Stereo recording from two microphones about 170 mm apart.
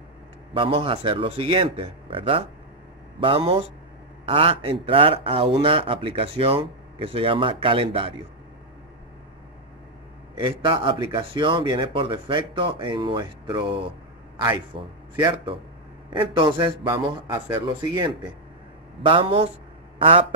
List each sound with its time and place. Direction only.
0.6 s speech: 30° right (ahead or behind)
10.3 s speech: 30° right (ahead or behind)